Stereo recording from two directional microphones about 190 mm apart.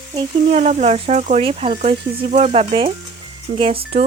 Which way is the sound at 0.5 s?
40° right (ahead or behind).